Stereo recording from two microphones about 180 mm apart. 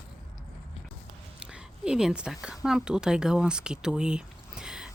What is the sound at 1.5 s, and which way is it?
Speech, 5° right (ahead or behind).